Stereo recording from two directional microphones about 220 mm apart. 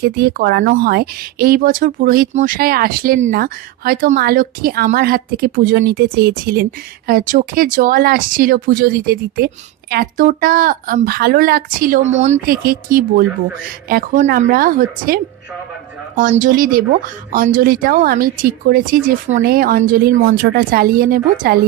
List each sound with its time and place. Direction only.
0.0 s speech: 45° right (ahead or behind)
16.3 s speech: 40° right (ahead or behind)